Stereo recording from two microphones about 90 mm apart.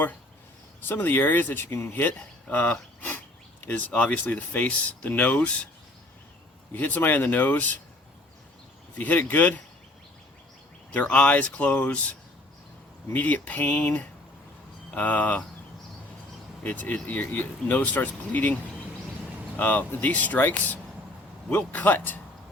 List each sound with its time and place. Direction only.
0.9 s speech: 25° left (ahead or behind)
6.7 s speech: 20° left (ahead or behind)
9.0 s speech: 20° left (ahead or behind)
10.9 s speech: 15° left (ahead or behind)
13.1 s speech: 20° left (ahead or behind)
16.6 s speech: 15° left (ahead or behind)
19.5 s speech: 15° left (ahead or behind)